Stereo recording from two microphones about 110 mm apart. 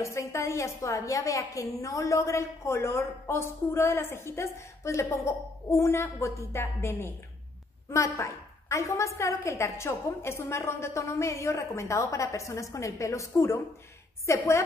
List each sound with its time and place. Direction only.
0.0 s a woman's voice: 25° left (ahead or behind)